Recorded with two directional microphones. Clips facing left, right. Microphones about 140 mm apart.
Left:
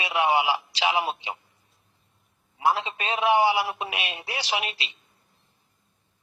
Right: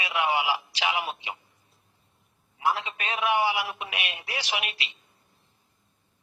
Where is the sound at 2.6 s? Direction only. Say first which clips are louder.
Left 3 dB; 30° left (ahead or behind).